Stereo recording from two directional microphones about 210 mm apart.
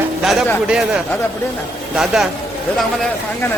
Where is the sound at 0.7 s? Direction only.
5° right (ahead or behind).